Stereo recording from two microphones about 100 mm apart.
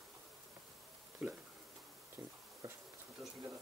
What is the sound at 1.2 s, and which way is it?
Speech, 10° right (ahead or behind).